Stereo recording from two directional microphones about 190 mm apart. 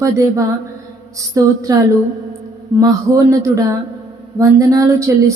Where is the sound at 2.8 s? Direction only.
20° right (ahead or behind).